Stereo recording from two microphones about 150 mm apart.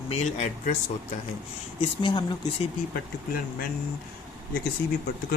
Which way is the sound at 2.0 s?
30° left (ahead or behind).